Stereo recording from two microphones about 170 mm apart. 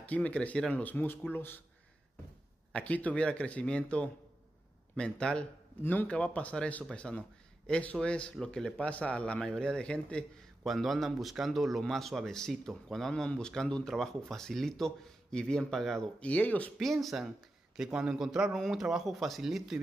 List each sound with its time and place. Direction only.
0.0 s speech: 10° left (ahead or behind)
2.7 s speech: 10° left (ahead or behind)